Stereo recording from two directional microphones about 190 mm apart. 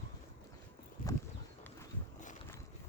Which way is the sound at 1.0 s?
45° left (ahead or behind).